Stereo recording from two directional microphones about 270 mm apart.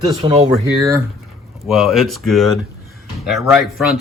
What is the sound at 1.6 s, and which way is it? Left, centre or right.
Speech, centre.